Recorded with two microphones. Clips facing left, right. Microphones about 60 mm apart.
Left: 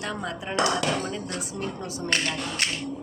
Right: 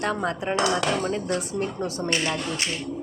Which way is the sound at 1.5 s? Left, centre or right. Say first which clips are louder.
Right 5 dB; right.